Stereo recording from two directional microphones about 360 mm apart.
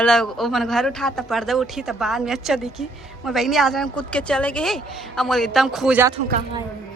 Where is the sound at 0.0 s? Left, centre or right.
Centre.